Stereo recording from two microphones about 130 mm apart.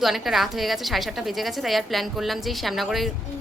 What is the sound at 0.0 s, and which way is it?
A woman's voice, centre (ahead or behind).